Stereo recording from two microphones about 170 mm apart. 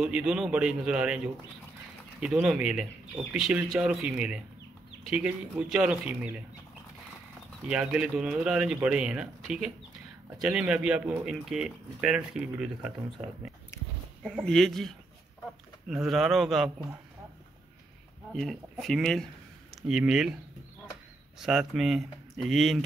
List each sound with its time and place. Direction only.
0.0 s speech: 5° right (ahead or behind)
7.6 s speech: 5° right (ahead or behind)
13.7 s a sound: 15° left (ahead or behind)
14.2 s speech: 5° left (ahead or behind)
18.3 s speech: centre (ahead or behind)
21.4 s speech: 5° right (ahead or behind)